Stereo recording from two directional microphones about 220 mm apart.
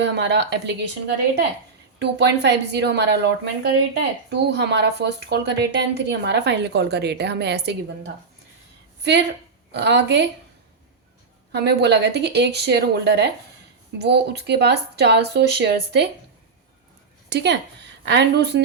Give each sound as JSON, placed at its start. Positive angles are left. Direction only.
{"t": 0.0, "sound": "speech", "side_deg": -50}
{"t": 2.0, "sound": "speech", "side_deg": -50}
{"t": 11.5, "sound": "speech", "side_deg": -50}
{"t": 17.2, "sound": "a woman's voice", "side_deg": -50}